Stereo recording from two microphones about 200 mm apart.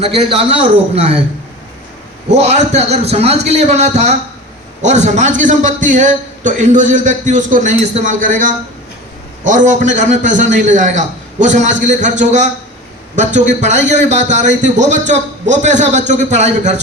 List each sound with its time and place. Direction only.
0.0 s a man's voice: 30° right (ahead or behind)
2.3 s a man's voice: 35° right (ahead or behind)